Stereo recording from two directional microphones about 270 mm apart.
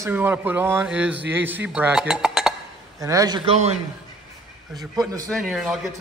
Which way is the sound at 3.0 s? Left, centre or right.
Centre.